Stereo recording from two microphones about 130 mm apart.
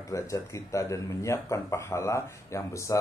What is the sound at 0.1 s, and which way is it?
Speech, 25° left (ahead or behind).